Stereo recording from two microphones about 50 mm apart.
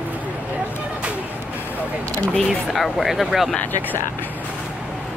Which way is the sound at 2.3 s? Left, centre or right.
Centre.